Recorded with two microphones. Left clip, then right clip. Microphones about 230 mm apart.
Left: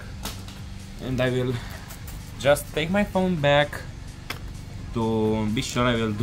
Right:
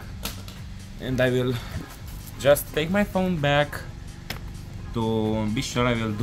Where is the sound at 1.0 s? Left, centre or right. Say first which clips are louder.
Right 2 dB; centre.